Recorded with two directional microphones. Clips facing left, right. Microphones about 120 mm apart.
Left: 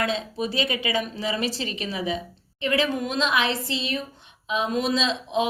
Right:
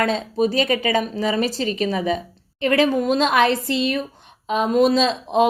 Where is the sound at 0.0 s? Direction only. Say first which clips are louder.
Right 7 dB; 45° right (ahead or behind).